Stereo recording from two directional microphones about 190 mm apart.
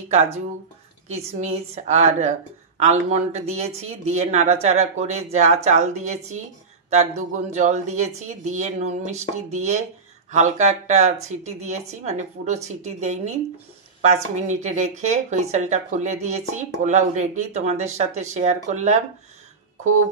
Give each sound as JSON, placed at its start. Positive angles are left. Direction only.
{"t": 1.1, "sound": "speech", "side_deg": -35}
{"t": 14.5, "sound": "speech", "side_deg": -40}